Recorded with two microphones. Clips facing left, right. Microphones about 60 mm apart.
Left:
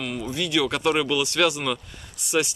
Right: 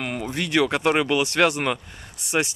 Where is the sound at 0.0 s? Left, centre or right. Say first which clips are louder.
Right 1 dB; right.